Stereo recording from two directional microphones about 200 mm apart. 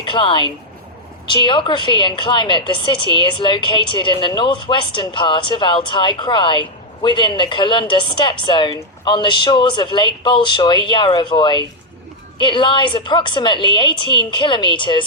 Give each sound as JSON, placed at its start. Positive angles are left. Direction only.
{"t": 0.0, "sound": "a woman's voice", "side_deg": 25}